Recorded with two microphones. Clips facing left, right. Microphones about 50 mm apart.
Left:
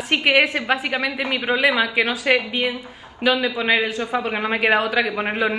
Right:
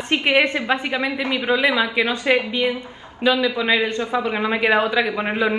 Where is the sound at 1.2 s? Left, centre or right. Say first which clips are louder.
Right 2 dB; left.